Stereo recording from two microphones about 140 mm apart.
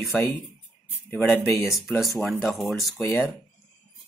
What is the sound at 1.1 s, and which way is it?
Speech, 15° left (ahead or behind).